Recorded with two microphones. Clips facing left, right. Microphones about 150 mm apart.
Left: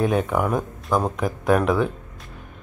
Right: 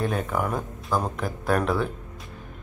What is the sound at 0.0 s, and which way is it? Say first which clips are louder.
Speech: left 5 dB; centre (ahead or behind).